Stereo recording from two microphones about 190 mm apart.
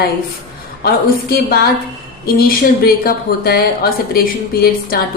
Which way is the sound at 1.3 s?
55° left (ahead or behind).